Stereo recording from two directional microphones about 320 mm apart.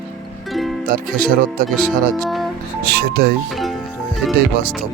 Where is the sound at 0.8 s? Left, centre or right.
Right.